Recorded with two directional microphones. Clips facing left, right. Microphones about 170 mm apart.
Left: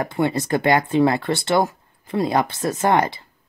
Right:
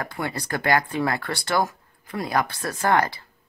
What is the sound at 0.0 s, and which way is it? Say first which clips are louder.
Speech: left 8 dB; 25° left (ahead or behind).